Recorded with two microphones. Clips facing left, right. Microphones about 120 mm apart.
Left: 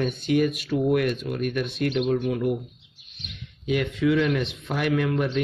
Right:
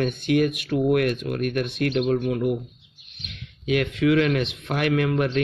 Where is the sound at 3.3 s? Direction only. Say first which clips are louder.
Right 2 dB; 70° right (ahead or behind).